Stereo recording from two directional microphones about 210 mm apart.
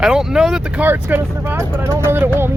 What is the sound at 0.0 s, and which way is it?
Speech, centre (ahead or behind).